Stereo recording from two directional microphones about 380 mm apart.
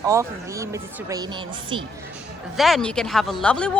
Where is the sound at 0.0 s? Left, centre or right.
Centre.